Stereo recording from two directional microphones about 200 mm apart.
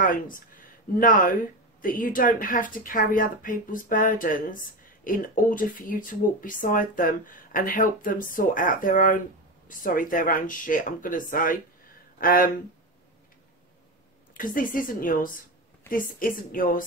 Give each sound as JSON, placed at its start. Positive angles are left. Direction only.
{"t": 0.0, "sound": "speech", "side_deg": 40}
{"t": 14.3, "sound": "speech", "side_deg": 45}